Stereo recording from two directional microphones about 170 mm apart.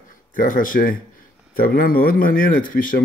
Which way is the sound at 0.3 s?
55° left (ahead or behind).